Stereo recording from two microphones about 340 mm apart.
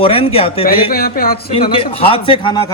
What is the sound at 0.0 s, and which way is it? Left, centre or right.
Speech, centre.